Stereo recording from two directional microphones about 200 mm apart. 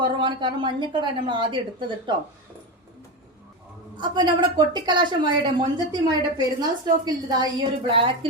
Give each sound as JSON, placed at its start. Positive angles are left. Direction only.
{"t": 0.0, "sound": "a woman's voice", "side_deg": -25}
{"t": 3.9, "sound": "a woman's voice", "side_deg": -20}